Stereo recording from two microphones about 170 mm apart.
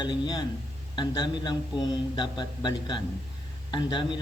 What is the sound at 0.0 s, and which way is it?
A man's voice, 25° left (ahead or behind).